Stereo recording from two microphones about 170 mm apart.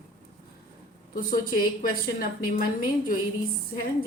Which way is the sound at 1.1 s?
55° left (ahead or behind).